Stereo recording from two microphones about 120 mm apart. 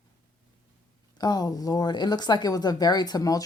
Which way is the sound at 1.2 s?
35° left (ahead or behind).